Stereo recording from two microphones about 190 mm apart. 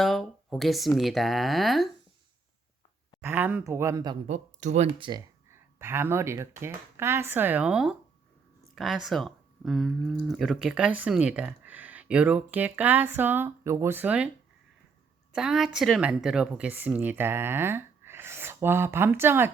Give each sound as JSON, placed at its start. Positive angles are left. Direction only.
{"t": 0.0, "sound": "speech", "side_deg": 0}
{"t": 3.2, "sound": "speech", "side_deg": -10}
{"t": 4.3, "sound": "speech", "side_deg": -35}
{"t": 4.9, "sound": "speech", "side_deg": -25}
{"t": 5.5, "sound": "speech", "side_deg": -15}
{"t": 15.3, "sound": "speech", "side_deg": -5}